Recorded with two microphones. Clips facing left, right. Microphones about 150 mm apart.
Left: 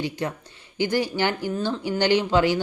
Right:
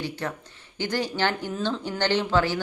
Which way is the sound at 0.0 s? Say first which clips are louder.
Left 3 dB; 15° left (ahead or behind).